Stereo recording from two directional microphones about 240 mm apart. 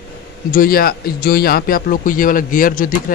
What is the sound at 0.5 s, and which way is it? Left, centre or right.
Speech, left.